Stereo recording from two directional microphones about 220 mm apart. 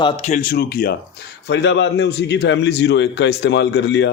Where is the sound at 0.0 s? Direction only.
30° left (ahead or behind).